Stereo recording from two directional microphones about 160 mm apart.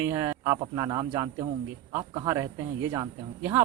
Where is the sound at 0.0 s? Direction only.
20° right (ahead or behind).